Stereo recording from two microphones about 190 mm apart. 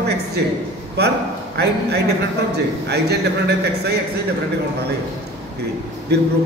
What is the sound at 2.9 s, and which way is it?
A man's voice, 60° right (ahead or behind).